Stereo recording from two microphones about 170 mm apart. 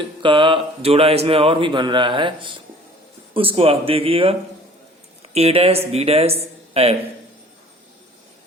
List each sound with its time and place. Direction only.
0.0 s speech: 30° right (ahead or behind)